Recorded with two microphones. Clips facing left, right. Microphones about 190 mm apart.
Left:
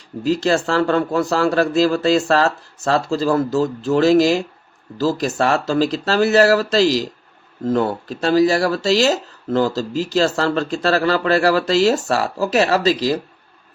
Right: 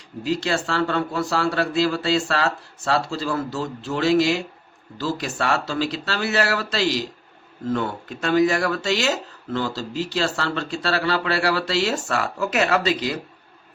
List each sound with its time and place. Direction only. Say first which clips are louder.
0.3 s speech: left 6 dB; 45° left (ahead or behind)